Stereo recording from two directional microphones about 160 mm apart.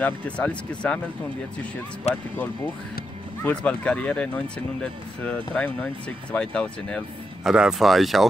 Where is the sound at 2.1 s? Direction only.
40° left (ahead or behind).